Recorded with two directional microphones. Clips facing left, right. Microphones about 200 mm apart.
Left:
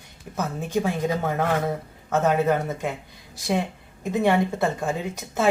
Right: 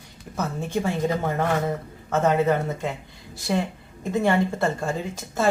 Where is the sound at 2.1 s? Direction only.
Centre (ahead or behind).